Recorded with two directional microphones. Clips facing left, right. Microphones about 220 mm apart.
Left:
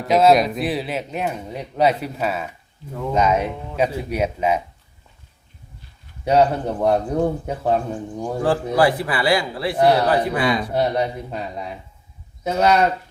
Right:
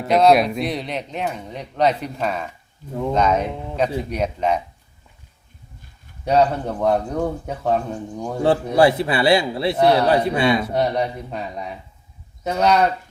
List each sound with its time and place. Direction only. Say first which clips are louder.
0.0 s speech: even; centre (ahead or behind)
6.2 s speech: left 1 dB; 10° left (ahead or behind)
8.4 s a man's voice: right 3 dB; 25° right (ahead or behind)
10.7 s speech: even; 5° left (ahead or behind)